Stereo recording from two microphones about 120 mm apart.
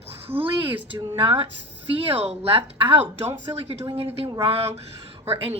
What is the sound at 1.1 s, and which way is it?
A woman's voice, 45° right (ahead or behind).